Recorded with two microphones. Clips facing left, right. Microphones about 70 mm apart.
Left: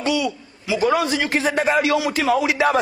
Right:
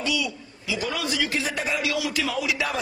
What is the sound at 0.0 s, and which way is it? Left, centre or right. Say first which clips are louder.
A man's voice: left 6 dB; left.